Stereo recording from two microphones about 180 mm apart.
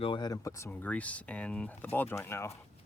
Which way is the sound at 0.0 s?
25° left (ahead or behind).